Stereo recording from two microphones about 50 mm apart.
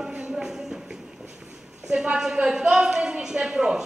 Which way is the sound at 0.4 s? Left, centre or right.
Centre.